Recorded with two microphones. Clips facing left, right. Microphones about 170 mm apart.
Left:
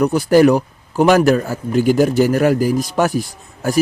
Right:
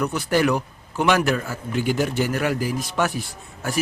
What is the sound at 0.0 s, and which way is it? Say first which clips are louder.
A man's voice: left 9 dB; 40° left (ahead or behind).